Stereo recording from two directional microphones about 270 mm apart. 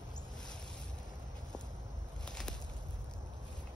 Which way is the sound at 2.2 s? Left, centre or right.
Centre.